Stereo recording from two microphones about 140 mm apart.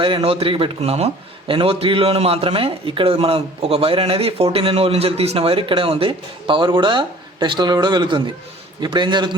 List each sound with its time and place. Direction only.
0.0 s a man's voice: 40° right (ahead or behind)